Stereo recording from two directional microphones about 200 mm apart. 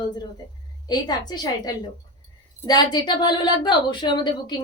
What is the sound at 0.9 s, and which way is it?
A woman's voice, 20° left (ahead or behind).